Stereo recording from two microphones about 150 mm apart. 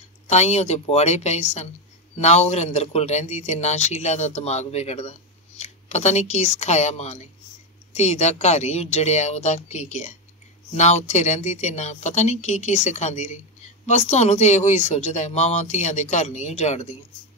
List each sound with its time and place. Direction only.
0.3 s speech: 45° left (ahead or behind)